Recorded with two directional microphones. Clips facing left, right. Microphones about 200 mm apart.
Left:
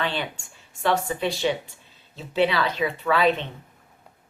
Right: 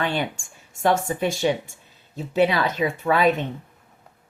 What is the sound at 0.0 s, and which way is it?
Speech, 45° right (ahead or behind).